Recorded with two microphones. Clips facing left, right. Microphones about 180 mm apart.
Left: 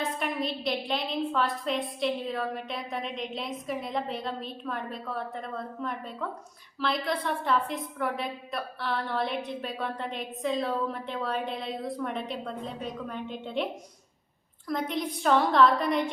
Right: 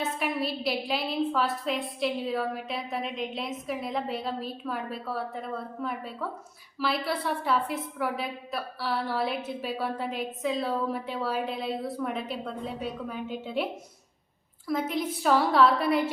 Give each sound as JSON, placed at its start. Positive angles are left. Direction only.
{"t": 0.0, "sound": "a woman's voice", "side_deg": -5}
{"t": 14.7, "sound": "a woman's voice", "side_deg": -5}